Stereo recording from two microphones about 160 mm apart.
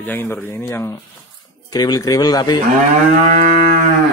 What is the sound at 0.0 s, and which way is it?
Speech, 10° left (ahead or behind).